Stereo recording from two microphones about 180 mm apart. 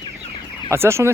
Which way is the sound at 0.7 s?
15° right (ahead or behind).